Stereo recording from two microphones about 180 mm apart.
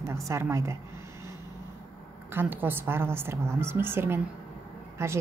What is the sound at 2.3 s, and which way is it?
A woman's voice, 10° right (ahead or behind).